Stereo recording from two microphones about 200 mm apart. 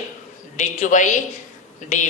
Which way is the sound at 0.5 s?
40° left (ahead or behind).